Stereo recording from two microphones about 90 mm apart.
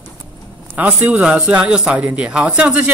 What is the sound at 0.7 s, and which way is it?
A man's voice, 20° right (ahead or behind).